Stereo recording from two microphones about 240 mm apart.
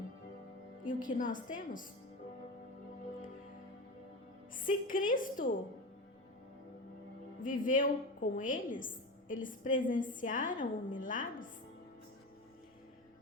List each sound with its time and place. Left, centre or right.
0.9 s a woman's voice: left
4.5 s a woman's voice: left
7.4 s a woman's voice: left